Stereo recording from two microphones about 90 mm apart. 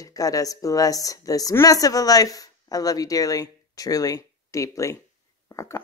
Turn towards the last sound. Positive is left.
turn(degrees=35)  # may be behind; listen again after turning